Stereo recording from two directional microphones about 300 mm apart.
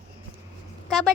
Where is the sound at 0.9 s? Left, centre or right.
Centre.